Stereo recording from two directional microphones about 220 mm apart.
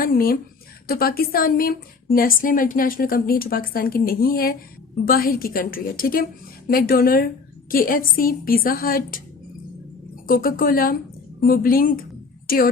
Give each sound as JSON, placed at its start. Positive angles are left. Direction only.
{"t": 0.0, "sound": "a woman's voice", "side_deg": 40}
{"t": 10.2, "sound": "a woman's voice", "side_deg": 40}